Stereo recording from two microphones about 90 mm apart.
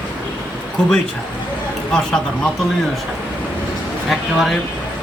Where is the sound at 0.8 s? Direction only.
10° left (ahead or behind).